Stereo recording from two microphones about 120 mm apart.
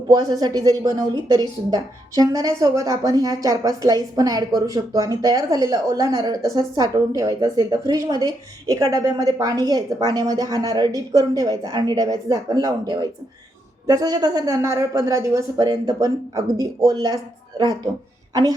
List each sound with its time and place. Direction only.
0.1 s a woman's voice: 30° right (ahead or behind)